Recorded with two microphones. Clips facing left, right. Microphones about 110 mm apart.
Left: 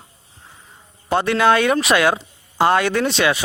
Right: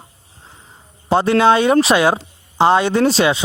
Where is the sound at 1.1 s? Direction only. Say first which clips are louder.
Right 3 dB; 30° right (ahead or behind).